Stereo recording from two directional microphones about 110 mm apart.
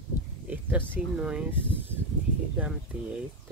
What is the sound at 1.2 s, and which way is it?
Speech, 10° right (ahead or behind).